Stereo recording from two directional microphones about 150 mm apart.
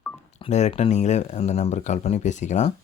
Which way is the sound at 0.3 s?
45° left (ahead or behind).